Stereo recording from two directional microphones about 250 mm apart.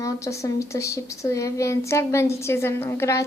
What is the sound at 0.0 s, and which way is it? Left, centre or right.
Speech, centre.